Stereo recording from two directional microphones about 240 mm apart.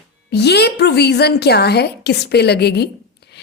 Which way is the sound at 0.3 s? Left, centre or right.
Left.